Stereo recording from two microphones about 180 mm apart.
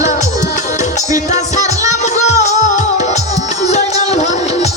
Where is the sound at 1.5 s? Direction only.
40° left (ahead or behind).